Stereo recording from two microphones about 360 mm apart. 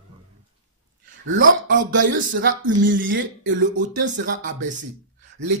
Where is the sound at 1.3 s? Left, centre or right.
Right.